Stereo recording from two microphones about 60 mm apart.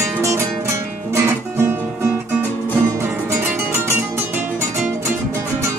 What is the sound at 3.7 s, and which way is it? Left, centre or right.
Music, right.